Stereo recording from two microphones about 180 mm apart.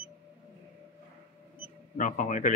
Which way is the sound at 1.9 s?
45° left (ahead or behind).